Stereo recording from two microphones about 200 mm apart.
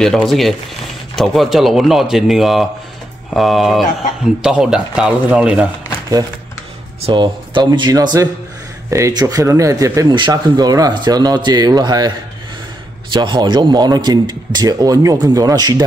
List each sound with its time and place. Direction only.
0.0 s speech: centre (ahead or behind)
7.1 s speech: 25° right (ahead or behind)
13.1 s speech: 20° right (ahead or behind)